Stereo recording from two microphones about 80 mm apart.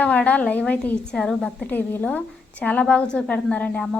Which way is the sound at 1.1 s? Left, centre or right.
Centre.